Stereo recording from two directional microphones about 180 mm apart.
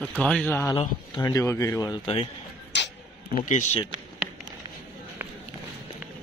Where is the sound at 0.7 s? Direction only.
20° left (ahead or behind).